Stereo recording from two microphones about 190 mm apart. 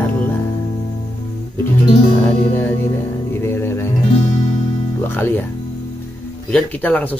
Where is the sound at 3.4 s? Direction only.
10° left (ahead or behind).